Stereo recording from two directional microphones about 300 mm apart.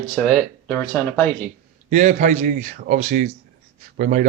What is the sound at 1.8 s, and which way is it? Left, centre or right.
Speech, right.